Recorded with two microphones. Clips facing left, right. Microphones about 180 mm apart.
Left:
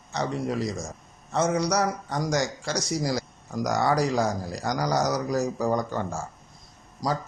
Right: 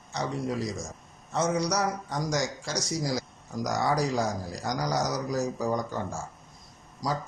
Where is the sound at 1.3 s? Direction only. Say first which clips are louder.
Left 3 dB; 65° left (ahead or behind).